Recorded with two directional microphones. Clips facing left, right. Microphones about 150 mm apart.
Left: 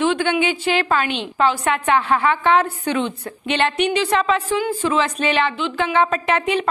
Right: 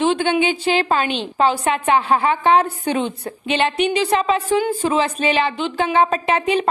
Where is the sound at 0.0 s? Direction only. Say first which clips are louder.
Right 1 dB; 30° right (ahead or behind).